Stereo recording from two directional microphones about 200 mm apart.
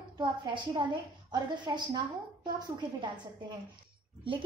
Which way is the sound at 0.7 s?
20° right (ahead or behind).